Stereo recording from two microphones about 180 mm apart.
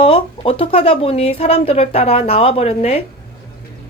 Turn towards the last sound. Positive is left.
turn(degrees=35)  # may be behind; listen again after turning